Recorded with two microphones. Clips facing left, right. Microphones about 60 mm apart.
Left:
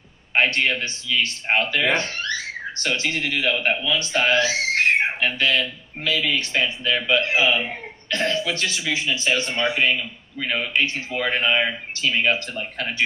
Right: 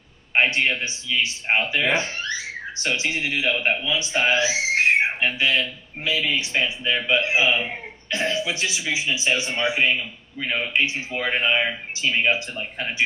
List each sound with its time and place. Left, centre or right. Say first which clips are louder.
0.3 s a man's voice: even; centre
2.0 s a sound: left 1 dB; centre
3.0 s a man's voice: left 1 dB; centre